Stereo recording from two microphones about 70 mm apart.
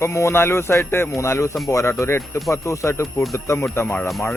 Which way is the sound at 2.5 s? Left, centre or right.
Left.